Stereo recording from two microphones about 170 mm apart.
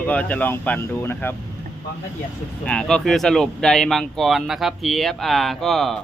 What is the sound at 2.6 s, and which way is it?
Speech, 5° left (ahead or behind).